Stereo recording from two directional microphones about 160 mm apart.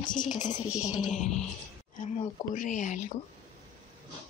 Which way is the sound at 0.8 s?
5° right (ahead or behind).